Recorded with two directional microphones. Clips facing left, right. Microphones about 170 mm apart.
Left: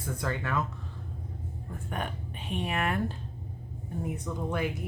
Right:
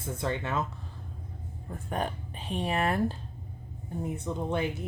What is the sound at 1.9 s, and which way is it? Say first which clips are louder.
Speech: right 4 dB; 35° right (ahead or behind).